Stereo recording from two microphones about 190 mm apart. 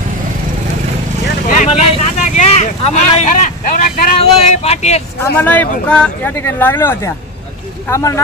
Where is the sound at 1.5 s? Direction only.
40° left (ahead or behind).